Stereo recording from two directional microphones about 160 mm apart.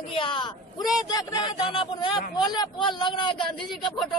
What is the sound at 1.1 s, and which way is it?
Speech, 25° left (ahead or behind).